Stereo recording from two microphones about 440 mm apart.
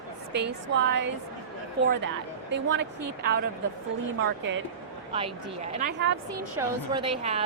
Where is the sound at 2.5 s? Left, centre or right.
Right.